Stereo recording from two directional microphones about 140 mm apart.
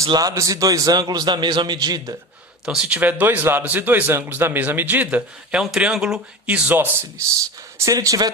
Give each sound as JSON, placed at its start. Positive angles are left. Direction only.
{"t": 0.0, "sound": "a man's voice", "side_deg": -25}
{"t": 2.6, "sound": "a man's voice", "side_deg": -5}
{"t": 7.8, "sound": "a man's voice", "side_deg": -25}